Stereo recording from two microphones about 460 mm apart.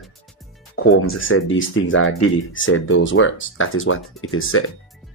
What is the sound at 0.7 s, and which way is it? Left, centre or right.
Speech, left.